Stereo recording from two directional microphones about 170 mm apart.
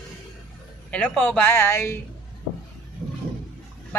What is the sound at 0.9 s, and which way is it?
A woman's voice, 5° left (ahead or behind).